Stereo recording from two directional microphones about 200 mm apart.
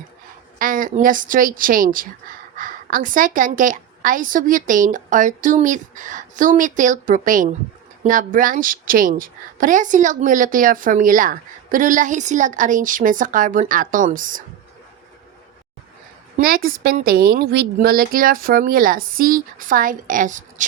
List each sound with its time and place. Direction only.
0.6 s a woman's voice: 40° right (ahead or behind)
16.4 s speech: 45° right (ahead or behind)